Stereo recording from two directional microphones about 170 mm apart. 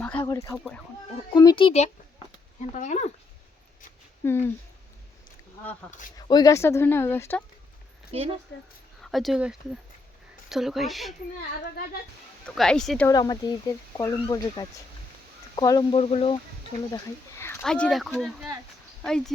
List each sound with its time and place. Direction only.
0.0 s a sound: 10° left (ahead or behind)
0.3 s speech: 20° left (ahead or behind)
0.5 s a woman's voice: centre (ahead or behind)
1.3 s speech: 25° left (ahead or behind); by 3.1 s 45° left (ahead or behind)
4.2 s speech: 15° left (ahead or behind)
6.1 s speech: 25° left (ahead or behind)
8.1 s a woman's voice: 35° right (ahead or behind)
9.0 s a woman's voice: centre (ahead or behind)
12.5 s a woman's voice: 5° left (ahead or behind)
13.1 s speech: 25° left (ahead or behind)
16.9 s a sound: 15° left (ahead or behind)
17.6 s a woman's voice: 5° left (ahead or behind)